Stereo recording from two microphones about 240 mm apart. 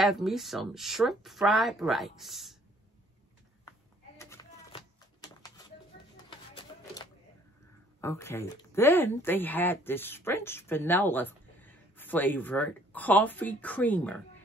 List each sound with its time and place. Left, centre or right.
0.0 s speech: centre
4.2 s a sound: centre
6.3 s music: centre
8.0 s speech: centre